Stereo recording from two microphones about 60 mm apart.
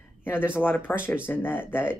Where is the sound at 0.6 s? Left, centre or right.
Left.